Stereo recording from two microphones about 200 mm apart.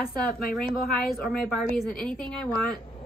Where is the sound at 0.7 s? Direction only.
Centre (ahead or behind).